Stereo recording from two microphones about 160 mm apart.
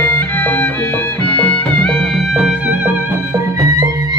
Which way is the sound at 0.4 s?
10° left (ahead or behind).